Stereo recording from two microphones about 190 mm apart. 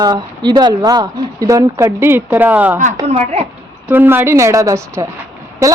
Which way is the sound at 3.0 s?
35° right (ahead or behind).